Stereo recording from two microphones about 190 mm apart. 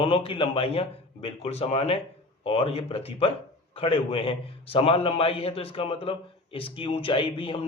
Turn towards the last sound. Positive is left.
turn(degrees=30)  # may be behind; listen again after turning